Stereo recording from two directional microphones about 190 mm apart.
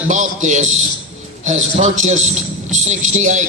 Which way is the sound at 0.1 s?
40° right (ahead or behind).